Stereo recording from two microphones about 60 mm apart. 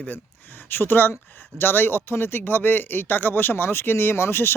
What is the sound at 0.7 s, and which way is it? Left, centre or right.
Speech, left.